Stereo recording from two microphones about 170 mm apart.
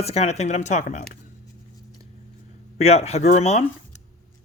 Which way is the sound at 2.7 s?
40° left (ahead or behind).